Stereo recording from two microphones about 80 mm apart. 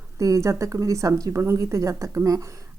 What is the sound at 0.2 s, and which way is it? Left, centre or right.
Speech, right.